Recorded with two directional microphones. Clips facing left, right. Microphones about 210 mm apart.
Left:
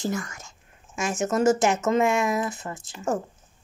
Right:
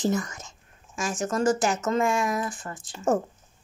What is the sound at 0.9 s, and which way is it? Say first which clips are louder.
A woman's voice: left 3 dB; 25° left (ahead or behind).